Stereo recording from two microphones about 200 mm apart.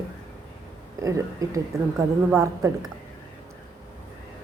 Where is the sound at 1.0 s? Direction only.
15° right (ahead or behind).